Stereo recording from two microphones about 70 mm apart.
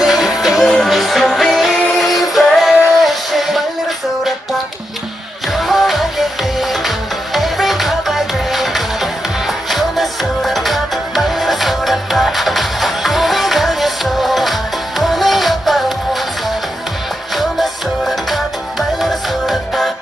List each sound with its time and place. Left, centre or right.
0.0 s music: centre
5.5 s music: centre
17.3 s music: centre